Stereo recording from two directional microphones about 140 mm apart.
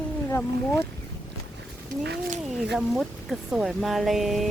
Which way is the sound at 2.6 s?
5° right (ahead or behind).